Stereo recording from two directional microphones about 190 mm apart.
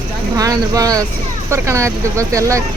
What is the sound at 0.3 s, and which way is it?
Speech, 20° right (ahead or behind).